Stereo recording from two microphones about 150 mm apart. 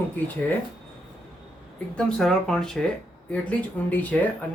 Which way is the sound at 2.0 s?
5° left (ahead or behind).